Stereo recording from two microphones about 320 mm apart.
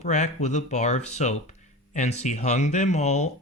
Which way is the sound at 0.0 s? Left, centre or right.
Left.